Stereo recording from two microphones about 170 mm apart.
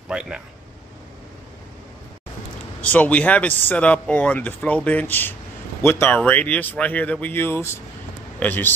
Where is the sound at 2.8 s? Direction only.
10° left (ahead or behind).